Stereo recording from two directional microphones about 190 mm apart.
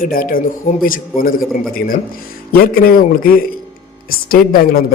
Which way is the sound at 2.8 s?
50° left (ahead or behind).